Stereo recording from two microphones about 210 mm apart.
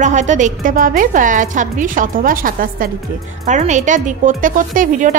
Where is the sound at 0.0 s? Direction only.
35° right (ahead or behind).